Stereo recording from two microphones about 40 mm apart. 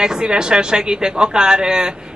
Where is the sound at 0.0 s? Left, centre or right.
Right.